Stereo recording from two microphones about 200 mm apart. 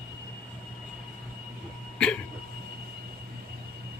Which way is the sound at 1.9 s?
5° left (ahead or behind).